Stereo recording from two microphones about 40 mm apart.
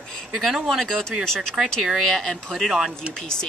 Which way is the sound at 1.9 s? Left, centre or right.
Centre.